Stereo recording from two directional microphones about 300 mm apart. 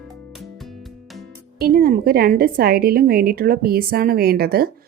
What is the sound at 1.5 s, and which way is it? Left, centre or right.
A woman's voice, right.